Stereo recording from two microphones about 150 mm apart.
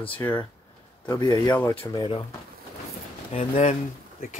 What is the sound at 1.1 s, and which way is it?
A man's voice, 25° left (ahead or behind).